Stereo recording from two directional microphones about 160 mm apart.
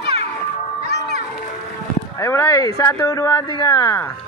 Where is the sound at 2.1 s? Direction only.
15° left (ahead or behind).